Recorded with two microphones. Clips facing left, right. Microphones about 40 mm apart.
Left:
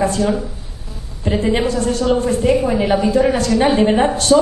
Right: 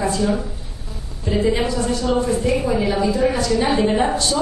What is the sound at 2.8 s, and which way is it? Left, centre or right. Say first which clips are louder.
A woman's voice: left 4 dB; left.